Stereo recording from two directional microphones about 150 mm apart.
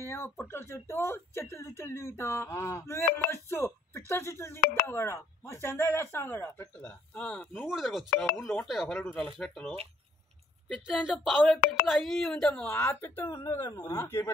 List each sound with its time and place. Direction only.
0.0 s speech: 15° left (ahead or behind)
13.9 s speech: 15° left (ahead or behind)